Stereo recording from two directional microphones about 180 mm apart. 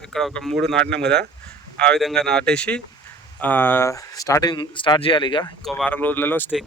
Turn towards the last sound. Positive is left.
turn(degrees=10)  # may be behind; listen again after turning